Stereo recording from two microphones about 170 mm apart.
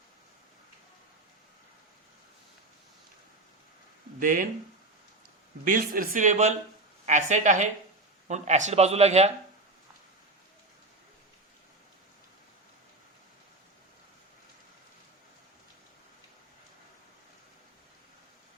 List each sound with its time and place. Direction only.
4.2 s speech: 50° right (ahead or behind)
5.6 s speech: 55° right (ahead or behind); by 9.3 s 40° right (ahead or behind)